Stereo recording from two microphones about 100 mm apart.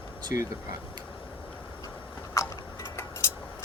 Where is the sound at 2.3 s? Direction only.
30° left (ahead or behind).